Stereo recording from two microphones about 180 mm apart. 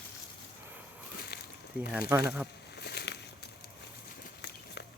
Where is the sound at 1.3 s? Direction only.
65° left (ahead or behind).